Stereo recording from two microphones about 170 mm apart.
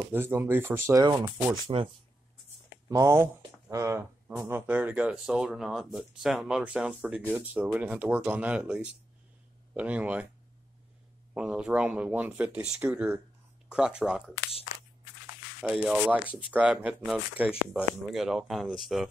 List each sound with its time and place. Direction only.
0.1 s speech: 10° right (ahead or behind)
1.7 s speech: 30° right (ahead or behind)
2.9 s speech: 15° right (ahead or behind)
11.3 s speech: 5° right (ahead or behind)
15.6 s speech: 5° right (ahead or behind)